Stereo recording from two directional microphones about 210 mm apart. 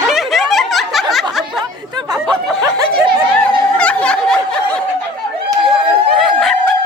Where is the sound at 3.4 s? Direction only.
5° left (ahead or behind).